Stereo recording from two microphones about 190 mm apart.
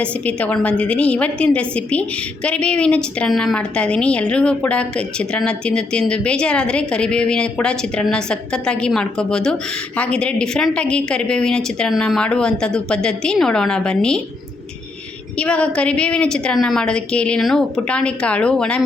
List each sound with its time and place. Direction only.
0.0 s a woman's voice: 5° left (ahead or behind)
15.4 s a woman's voice: 5° left (ahead or behind)